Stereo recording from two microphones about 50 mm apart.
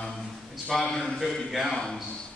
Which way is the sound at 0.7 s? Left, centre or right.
Centre.